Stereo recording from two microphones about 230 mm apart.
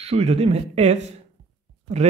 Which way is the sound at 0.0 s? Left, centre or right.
Right.